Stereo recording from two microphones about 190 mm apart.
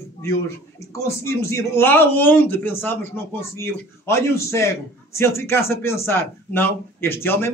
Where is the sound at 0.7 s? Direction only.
15° left (ahead or behind).